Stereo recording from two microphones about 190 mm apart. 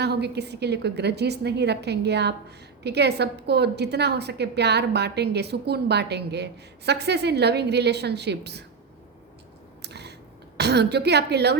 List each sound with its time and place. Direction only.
0.0 s a woman's voice: 60° right (ahead or behind)
9.8 s a sound: 60° right (ahead or behind)
10.6 s a woman's voice: 60° right (ahead or behind)